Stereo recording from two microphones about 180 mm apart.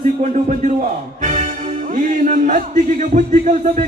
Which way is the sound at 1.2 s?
40° right (ahead or behind).